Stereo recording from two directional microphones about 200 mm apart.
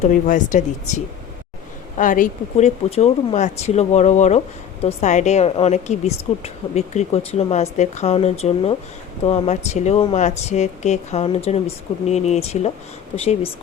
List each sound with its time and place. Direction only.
0.0 s a woman's voice: 40° left (ahead or behind)